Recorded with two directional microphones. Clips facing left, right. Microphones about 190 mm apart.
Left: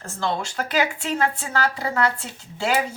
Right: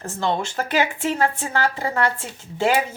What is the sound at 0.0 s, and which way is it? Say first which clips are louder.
Speech: right 2 dB; 20° right (ahead or behind).